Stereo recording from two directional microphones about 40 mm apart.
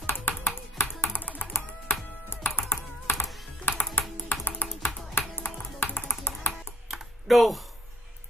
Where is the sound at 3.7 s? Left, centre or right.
Left.